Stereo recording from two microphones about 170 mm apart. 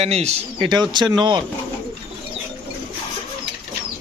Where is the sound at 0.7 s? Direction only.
25° right (ahead or behind).